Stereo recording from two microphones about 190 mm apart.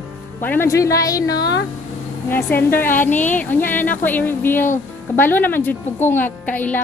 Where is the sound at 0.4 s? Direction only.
10° left (ahead or behind).